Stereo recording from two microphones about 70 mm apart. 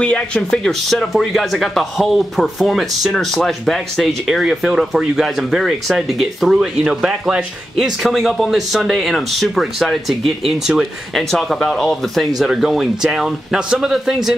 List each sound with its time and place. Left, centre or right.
0.0 s speech: centre
0.5 s speech: centre